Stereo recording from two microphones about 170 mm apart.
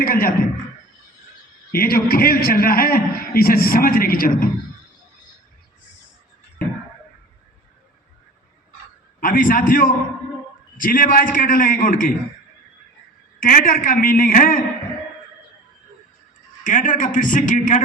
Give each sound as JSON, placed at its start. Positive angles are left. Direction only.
{"t": 0.0, "sound": "a man's voice", "side_deg": 55}
{"t": 1.7, "sound": "a man's voice", "side_deg": 60}
{"t": 9.2, "sound": "a man's voice", "side_deg": 55}
{"t": 13.4, "sound": "a man's voice", "side_deg": 55}
{"t": 16.6, "sound": "a man's voice", "side_deg": 50}